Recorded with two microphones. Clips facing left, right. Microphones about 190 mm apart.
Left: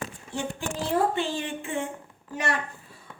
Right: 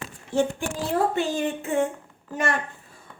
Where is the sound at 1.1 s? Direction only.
40° right (ahead or behind).